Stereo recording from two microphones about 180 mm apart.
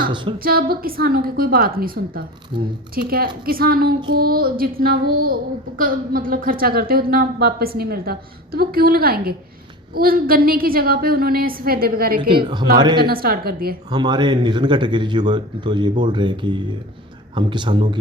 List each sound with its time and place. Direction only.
0.0 s a woman's voice: 25° right (ahead or behind)
0.3 s child singing: 55° right (ahead or behind)
12.3 s a man's voice: 25° right (ahead or behind)
13.0 s child singing: 55° right (ahead or behind)
13.9 s a man's voice: 25° right (ahead or behind)